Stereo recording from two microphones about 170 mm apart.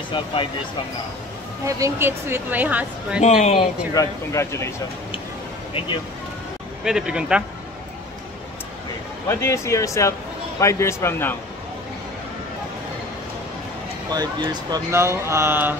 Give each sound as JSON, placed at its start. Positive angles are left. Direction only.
{"t": 0.1, "sound": "speech", "side_deg": 30}
{"t": 1.7, "sound": "a woman's voice", "side_deg": -15}
{"t": 3.2, "sound": "speech", "side_deg": 45}
{"t": 3.9, "sound": "speech", "side_deg": 20}
{"t": 6.8, "sound": "speech", "side_deg": -5}
{"t": 9.3, "sound": "speech", "side_deg": 15}
{"t": 14.1, "sound": "a woman's voice", "side_deg": -25}